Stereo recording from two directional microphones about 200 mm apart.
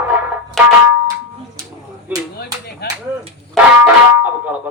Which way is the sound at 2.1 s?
10° right (ahead or behind).